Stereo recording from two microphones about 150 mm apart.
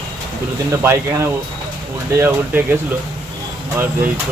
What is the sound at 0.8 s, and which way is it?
Speech, 20° right (ahead or behind).